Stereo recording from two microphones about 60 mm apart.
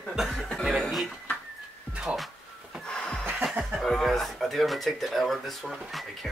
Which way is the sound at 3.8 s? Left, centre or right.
Centre.